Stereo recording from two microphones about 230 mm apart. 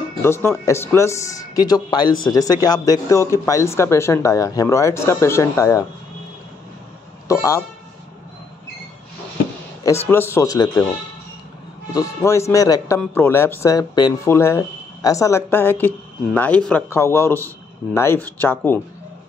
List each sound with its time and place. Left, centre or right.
0.2 s a man's voice: centre
7.2 s a man's voice: centre
9.8 s a man's voice: centre
11.9 s a man's voice: centre